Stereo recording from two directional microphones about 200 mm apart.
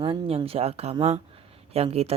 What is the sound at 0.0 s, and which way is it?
Speech, 20° right (ahead or behind).